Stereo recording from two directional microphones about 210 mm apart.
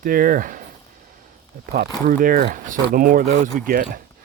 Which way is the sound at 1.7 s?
45° right (ahead or behind).